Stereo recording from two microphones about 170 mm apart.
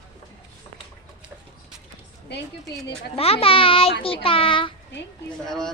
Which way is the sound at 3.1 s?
35° left (ahead or behind).